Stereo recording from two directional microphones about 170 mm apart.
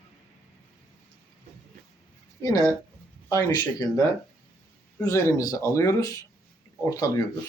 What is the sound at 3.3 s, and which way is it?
Speech, 20° left (ahead or behind).